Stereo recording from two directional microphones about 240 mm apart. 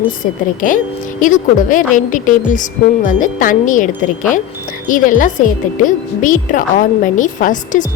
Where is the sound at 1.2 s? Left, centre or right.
Left.